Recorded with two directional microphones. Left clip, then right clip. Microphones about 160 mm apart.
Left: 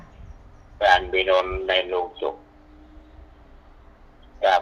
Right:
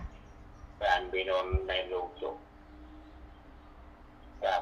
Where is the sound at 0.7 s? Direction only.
85° left.